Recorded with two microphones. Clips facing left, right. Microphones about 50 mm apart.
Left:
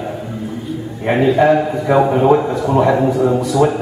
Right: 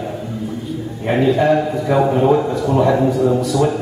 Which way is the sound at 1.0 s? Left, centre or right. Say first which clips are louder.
Left 2 dB; centre.